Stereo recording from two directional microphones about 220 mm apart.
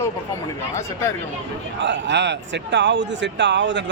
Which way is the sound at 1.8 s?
55° right (ahead or behind).